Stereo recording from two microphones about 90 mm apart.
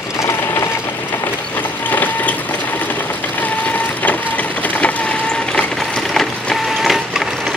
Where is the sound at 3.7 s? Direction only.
20° left (ahead or behind).